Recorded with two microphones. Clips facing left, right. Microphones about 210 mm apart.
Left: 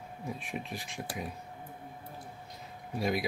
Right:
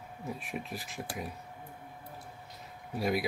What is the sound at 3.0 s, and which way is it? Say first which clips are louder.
Speech: right 1 dB; centre (ahead or behind).